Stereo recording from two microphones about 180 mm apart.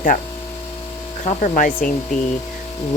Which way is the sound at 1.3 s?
45° left (ahead or behind).